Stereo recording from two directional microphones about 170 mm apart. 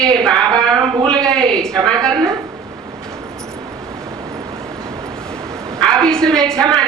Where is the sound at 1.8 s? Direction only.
25° right (ahead or behind).